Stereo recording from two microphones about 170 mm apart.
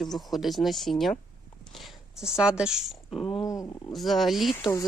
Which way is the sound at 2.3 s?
5° right (ahead or behind).